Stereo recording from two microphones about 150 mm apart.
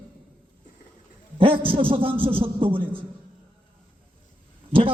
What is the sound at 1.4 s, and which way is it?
A man's voice, 35° right (ahead or behind).